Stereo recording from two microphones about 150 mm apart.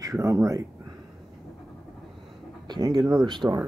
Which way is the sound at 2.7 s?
25° right (ahead or behind).